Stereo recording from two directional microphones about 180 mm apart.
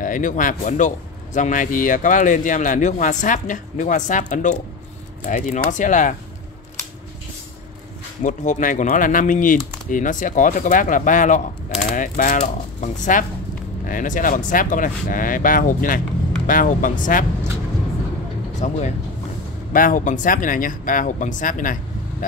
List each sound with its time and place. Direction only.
0.0 s a man's voice: 45° left (ahead or behind)
8.2 s a man's voice: 45° left (ahead or behind)
18.6 s a man's voice: 40° left (ahead or behind)